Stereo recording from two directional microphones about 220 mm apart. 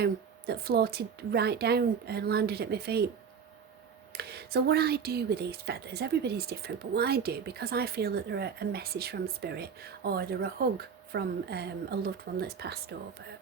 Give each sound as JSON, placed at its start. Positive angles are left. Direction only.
{"t": 0.0, "sound": "speech", "side_deg": -45}
{"t": 4.1, "sound": "speech", "side_deg": -45}